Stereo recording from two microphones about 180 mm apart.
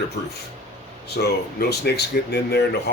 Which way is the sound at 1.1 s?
65° left (ahead or behind).